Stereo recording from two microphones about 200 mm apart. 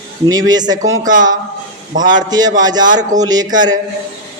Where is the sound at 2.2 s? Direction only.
20° right (ahead or behind).